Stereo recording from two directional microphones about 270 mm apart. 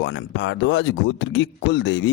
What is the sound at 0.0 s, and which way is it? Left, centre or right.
Speech, left.